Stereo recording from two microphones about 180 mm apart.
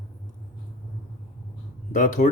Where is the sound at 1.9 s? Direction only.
45° left (ahead or behind).